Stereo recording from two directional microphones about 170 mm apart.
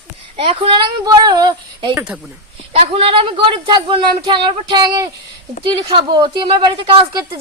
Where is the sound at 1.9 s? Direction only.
5° right (ahead or behind).